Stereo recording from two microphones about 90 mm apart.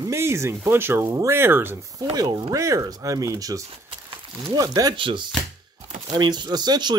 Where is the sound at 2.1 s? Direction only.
45° right (ahead or behind).